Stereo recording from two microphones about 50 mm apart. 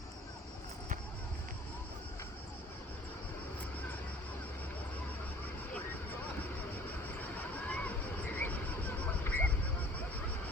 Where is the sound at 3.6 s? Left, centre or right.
Left.